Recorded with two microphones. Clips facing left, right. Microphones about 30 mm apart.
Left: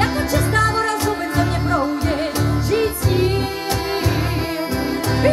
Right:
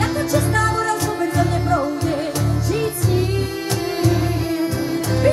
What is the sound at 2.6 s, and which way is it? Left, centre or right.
Music, left.